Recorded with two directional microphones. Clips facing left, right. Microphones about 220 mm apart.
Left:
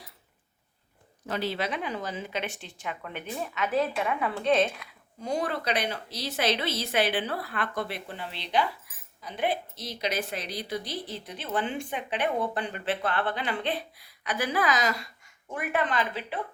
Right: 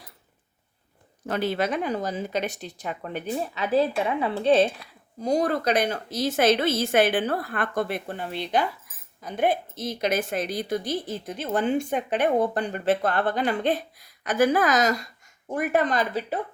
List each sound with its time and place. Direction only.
1.3 s speech: 50° right (ahead or behind)